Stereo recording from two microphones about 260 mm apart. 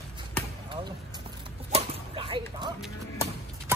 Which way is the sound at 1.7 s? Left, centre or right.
Right.